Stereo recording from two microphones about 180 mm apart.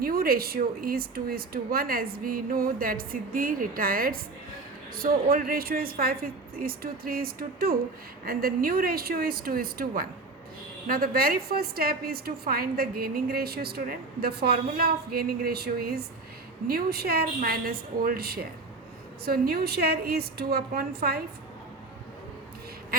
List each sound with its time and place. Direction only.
0.0 s a woman's voice: 55° right (ahead or behind)